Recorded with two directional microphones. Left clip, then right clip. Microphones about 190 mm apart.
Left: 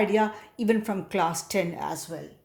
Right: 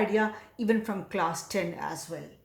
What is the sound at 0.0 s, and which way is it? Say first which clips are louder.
A woman's voice: left 3 dB; 40° left (ahead or behind).